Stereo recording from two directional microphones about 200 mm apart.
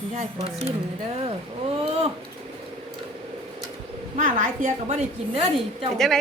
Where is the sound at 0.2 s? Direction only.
30° right (ahead or behind).